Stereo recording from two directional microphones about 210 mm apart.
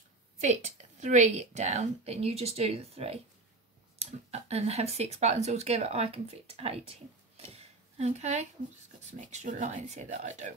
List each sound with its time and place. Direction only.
0.4 s a woman's voice: 35° right (ahead or behind)
7.4 s a sound: 30° right (ahead or behind)
9.3 s a woman's voice: 35° right (ahead or behind)